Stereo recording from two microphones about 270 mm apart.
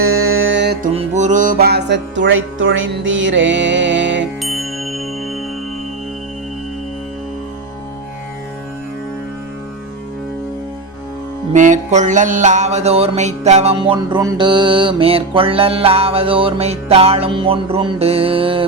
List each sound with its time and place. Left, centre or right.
0.0 s music: right
0.9 s music: right
4.4 s music: centre
11.5 s mantra: right